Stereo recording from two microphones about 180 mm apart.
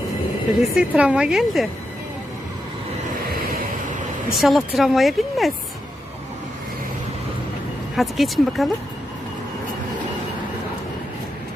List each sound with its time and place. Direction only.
0.6 s speech: 5° right (ahead or behind)
3.2 s vehicle: 55° right (ahead or behind)
4.4 s speech: centre (ahead or behind)
7.9 s speech: centre (ahead or behind)